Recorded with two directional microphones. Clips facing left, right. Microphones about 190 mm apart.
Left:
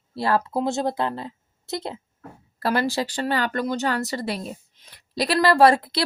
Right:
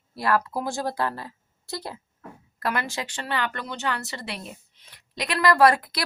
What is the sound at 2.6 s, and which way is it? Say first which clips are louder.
Speech: left 6 dB; 35° left (ahead or behind).